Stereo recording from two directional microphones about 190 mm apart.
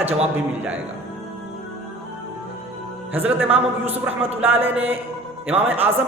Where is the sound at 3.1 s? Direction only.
10° right (ahead or behind).